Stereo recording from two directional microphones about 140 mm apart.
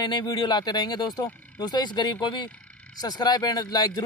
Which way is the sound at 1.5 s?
30° left (ahead or behind).